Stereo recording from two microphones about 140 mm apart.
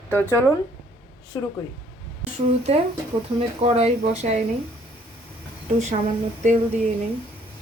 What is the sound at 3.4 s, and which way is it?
Speech, 50° right (ahead or behind).